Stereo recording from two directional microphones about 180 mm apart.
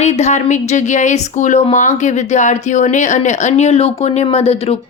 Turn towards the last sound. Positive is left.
turn(degrees=35)  # may be behind; listen again after turning